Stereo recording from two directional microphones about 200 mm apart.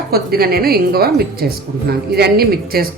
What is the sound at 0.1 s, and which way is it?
A woman's voice, 50° right (ahead or behind).